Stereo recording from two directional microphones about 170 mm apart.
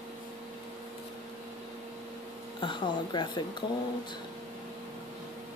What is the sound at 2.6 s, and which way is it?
Speech, 30° left (ahead or behind).